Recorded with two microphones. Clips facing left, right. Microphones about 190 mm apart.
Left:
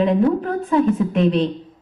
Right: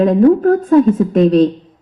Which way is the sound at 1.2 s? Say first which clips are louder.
Right 8 dB; 40° right (ahead or behind).